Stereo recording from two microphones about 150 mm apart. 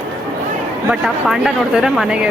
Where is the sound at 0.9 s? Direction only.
5° right (ahead or behind).